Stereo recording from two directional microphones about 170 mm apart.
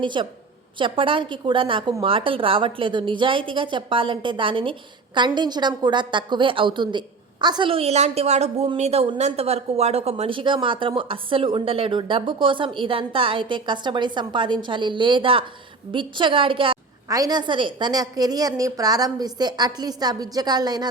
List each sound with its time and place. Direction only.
0.0 s a woman's voice: 30° right (ahead or behind)